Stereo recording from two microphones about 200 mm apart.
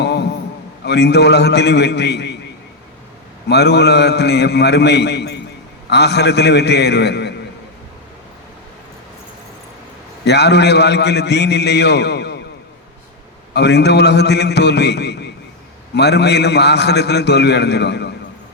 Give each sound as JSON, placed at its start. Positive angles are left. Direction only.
{"t": 0.0, "sound": "a sound", "side_deg": 55}
{"t": 0.9, "sound": "a man's voice", "side_deg": 55}
{"t": 3.5, "sound": "a man's voice", "side_deg": 55}
{"t": 10.2, "sound": "a man's voice", "side_deg": 55}
{"t": 13.5, "sound": "a man's voice", "side_deg": 55}